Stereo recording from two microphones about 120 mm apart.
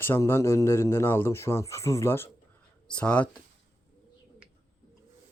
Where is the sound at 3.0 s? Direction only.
10° left (ahead or behind).